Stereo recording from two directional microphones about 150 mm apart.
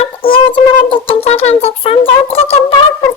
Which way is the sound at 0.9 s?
40° left (ahead or behind).